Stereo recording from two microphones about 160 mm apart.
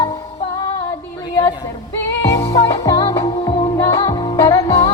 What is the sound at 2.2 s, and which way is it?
Music, 20° left (ahead or behind).